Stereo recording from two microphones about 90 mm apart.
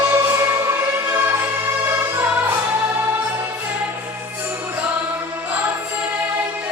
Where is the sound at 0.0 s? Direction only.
25° right (ahead or behind).